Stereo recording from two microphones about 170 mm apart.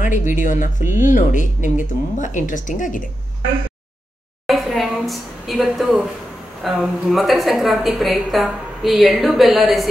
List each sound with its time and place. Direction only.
0.0 s speech: 50° left (ahead or behind)
4.5 s a sound: centre (ahead or behind)
6.6 s a woman's voice: centre (ahead or behind)